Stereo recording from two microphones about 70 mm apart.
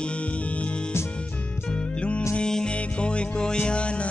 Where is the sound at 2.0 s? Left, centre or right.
Centre.